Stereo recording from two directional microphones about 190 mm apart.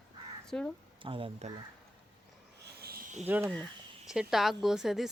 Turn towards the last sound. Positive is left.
turn(degrees=0)  # may be behind; listen again after turning